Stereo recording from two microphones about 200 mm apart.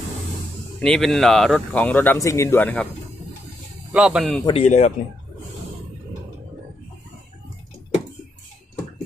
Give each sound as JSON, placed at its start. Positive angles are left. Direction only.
{"t": 0.7, "sound": "speech", "side_deg": 5}
{"t": 3.9, "sound": "speech", "side_deg": -5}
{"t": 4.5, "sound": "speech", "side_deg": 35}